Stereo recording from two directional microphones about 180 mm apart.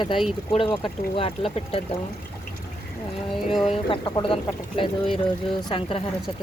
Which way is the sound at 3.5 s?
30° left (ahead or behind).